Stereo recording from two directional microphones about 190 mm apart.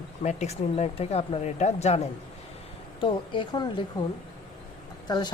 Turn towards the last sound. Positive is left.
turn(degrees=20)  # may be behind; listen again after turning